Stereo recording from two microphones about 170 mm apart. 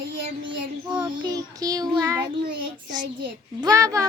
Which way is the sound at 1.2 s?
20° right (ahead or behind).